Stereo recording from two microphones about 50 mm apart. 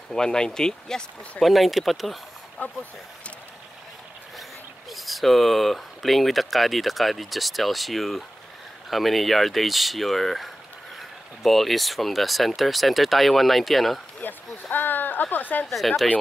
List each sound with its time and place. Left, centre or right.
0.1 s speech: centre
1.4 s speech: centre
4.9 s speech: centre
14.2 s speech: left
15.6 s speech: centre